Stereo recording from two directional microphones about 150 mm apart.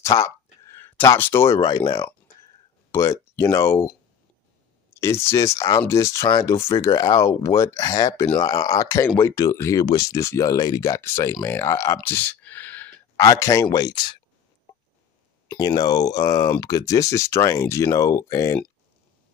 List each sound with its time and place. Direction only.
0.0 s a sound: 20° left (ahead or behind)
1.0 s speech: 15° left (ahead or behind)
1.8 s speech: 30° left (ahead or behind)
2.9 s speech: 20° left (ahead or behind)
5.0 s speech: 20° left (ahead or behind)
15.6 s speech: 25° left (ahead or behind)